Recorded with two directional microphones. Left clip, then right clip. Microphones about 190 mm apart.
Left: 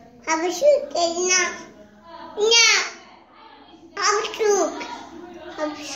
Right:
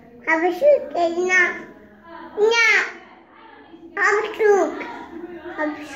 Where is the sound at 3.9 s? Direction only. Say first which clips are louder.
Right 3 dB; 10° left (ahead or behind).